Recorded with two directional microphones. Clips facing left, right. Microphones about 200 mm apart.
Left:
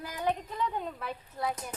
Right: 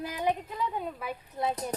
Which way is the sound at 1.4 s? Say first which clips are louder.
Right 3 dB; 20° right (ahead or behind).